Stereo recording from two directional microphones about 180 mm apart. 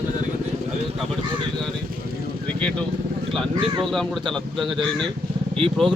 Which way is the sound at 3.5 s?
25° right (ahead or behind).